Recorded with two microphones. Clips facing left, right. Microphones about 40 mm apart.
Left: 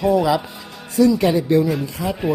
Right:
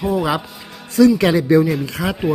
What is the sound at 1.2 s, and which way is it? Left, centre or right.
Speech, right.